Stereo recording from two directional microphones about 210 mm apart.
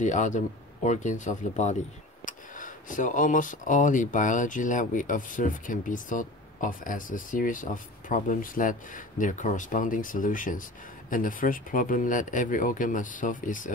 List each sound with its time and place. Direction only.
0.0 s speech: 35° left (ahead or behind)